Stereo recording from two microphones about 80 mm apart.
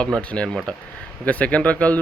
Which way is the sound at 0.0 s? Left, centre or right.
Centre.